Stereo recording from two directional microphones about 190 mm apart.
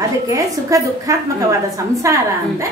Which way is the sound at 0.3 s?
15° right (ahead or behind).